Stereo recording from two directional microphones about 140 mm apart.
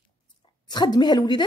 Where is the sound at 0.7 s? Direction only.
30° left (ahead or behind).